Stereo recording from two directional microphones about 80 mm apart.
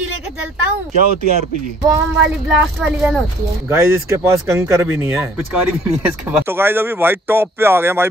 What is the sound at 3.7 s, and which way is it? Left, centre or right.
Speech, right.